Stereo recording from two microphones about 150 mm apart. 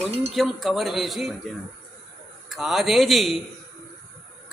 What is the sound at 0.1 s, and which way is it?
Speech, 45° right (ahead or behind).